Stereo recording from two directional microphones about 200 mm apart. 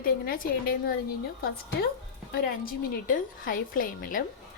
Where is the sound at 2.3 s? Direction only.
45° left (ahead or behind).